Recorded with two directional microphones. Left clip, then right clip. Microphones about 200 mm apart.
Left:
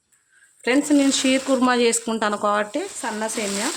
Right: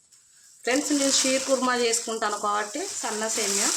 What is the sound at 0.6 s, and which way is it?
Speech, 55° left (ahead or behind).